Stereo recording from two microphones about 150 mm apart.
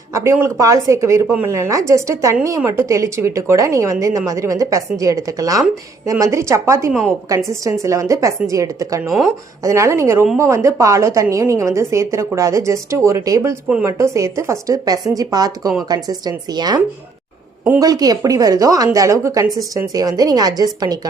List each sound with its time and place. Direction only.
0.1 s a woman's voice: 20° right (ahead or behind)
9.0 s speech: centre (ahead or behind)
9.6 s a woman's voice: 20° right (ahead or behind)